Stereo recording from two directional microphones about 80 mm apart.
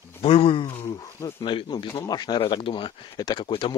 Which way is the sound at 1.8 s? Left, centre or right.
Left.